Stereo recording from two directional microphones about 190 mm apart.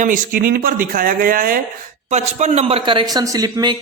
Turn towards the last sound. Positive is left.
turn(degrees=-20)  # may be behind; listen again after turning